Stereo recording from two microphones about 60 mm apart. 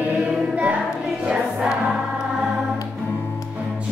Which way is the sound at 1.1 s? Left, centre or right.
Centre.